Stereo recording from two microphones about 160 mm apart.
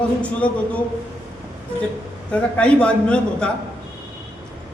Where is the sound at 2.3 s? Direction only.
5° left (ahead or behind).